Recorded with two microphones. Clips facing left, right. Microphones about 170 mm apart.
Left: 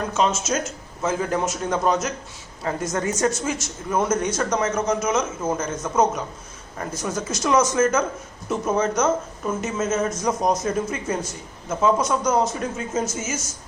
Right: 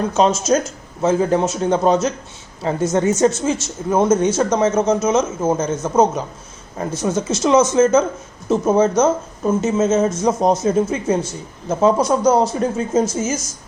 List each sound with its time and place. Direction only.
0.1 s speech: 35° right (ahead or behind)